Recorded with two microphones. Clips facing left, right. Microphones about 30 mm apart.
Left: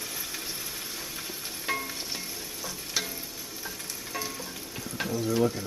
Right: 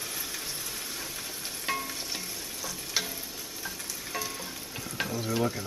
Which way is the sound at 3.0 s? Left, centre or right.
Centre.